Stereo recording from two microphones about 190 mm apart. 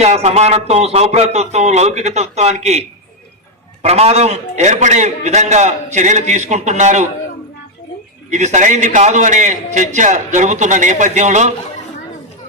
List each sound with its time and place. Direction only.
0.0 s a man's voice: 35° right (ahead or behind)
3.8 s a man's voice: 35° right (ahead or behind)
8.3 s a man's voice: 40° right (ahead or behind)